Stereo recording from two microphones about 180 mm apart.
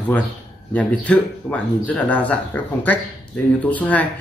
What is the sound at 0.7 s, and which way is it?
Speech, 5° left (ahead or behind).